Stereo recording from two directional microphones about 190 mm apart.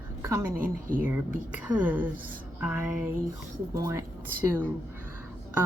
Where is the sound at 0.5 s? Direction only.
45° right (ahead or behind).